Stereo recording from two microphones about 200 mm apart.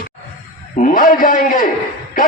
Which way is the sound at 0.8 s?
40° left (ahead or behind).